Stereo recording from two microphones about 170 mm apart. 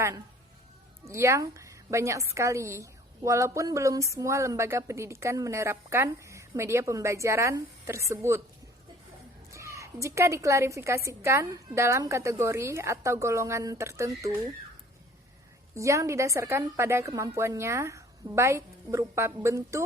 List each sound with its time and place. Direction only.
1.0 s a woman's voice: 15° right (ahead or behind)
9.5 s a woman's voice: 15° right (ahead or behind)
15.7 s a woman's voice: 15° right (ahead or behind)